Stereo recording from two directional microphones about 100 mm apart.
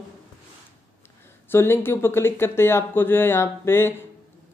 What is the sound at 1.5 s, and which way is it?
A man's voice, 20° left (ahead or behind).